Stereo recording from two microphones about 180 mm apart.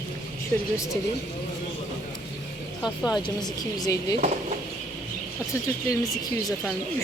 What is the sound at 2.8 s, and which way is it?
Speech, centre (ahead or behind).